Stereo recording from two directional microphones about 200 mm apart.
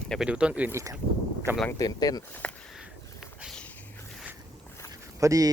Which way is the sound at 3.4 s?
Centre (ahead or behind).